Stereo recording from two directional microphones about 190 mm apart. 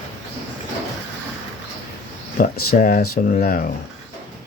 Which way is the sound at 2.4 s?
45° left (ahead or behind).